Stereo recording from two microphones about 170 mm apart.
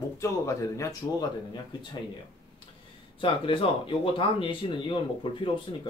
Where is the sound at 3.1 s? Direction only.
30° left (ahead or behind).